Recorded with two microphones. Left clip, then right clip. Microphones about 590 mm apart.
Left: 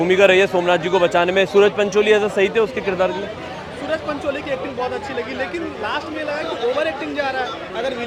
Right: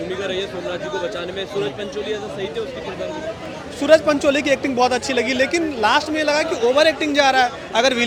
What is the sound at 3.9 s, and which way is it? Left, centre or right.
Speech, right.